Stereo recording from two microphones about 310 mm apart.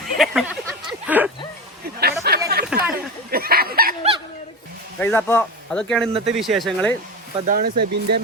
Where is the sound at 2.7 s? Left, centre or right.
Centre.